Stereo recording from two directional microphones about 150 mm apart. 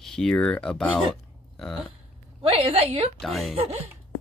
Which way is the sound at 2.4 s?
40° right (ahead or behind).